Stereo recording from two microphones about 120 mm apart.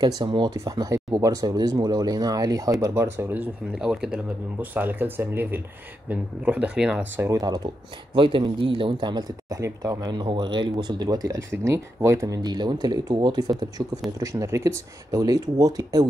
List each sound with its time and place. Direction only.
0.0 s speech: 35° right (ahead or behind); by 3.4 s 20° right (ahead or behind)
3.7 s speech: 5° right (ahead or behind)
7.2 s speech: 25° right (ahead or behind)